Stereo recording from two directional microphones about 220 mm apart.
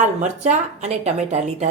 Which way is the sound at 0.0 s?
30° right (ahead or behind).